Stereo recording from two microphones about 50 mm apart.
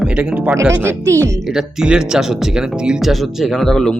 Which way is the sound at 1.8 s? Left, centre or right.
Centre.